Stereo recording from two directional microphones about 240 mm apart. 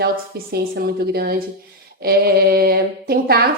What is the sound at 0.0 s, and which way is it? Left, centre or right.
A woman's voice, right.